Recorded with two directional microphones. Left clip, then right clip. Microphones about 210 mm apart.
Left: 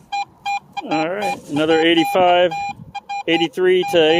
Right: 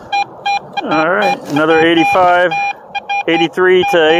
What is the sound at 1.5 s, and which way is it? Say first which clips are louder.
Speech: right 4 dB; 15° left (ahead or behind).